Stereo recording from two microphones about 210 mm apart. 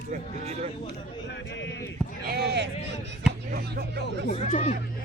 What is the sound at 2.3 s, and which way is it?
Speech, 50° right (ahead or behind).